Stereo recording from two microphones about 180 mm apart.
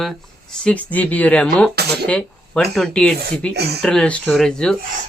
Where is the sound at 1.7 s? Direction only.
65° right (ahead or behind).